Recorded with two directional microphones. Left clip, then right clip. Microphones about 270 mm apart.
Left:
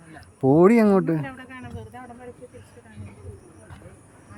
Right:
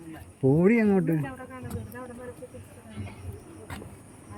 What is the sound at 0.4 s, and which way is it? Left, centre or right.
Speech, centre.